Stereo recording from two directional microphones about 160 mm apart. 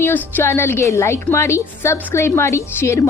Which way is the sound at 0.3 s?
15° left (ahead or behind).